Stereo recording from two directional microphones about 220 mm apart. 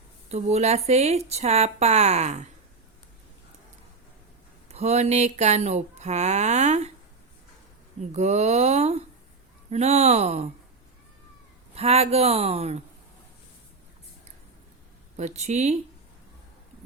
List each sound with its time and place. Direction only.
0.3 s speech: 30° right (ahead or behind)
4.7 s speech: 30° right (ahead or behind)
8.1 s speech: 30° right (ahead or behind)
11.7 s speech: 25° right (ahead or behind)
15.1 s speech: 30° right (ahead or behind)